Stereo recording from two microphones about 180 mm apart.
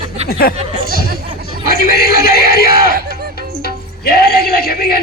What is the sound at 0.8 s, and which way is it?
Chatter, 60° left (ahead or behind).